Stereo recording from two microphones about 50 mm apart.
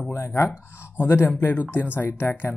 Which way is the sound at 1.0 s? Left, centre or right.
Left.